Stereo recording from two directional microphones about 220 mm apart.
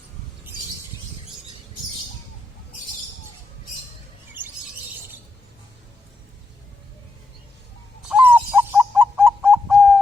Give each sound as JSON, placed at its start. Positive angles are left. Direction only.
{"t": 8.1, "sound": "bird", "side_deg": -10}